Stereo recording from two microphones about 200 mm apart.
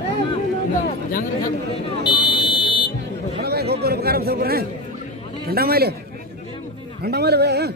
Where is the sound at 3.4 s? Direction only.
55° right (ahead or behind).